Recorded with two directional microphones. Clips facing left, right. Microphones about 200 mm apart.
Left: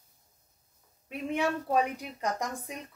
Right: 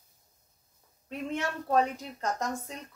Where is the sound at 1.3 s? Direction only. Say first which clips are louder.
Left 3 dB; 15° left (ahead or behind).